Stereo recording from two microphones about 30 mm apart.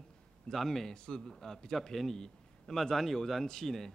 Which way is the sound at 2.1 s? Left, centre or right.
Left.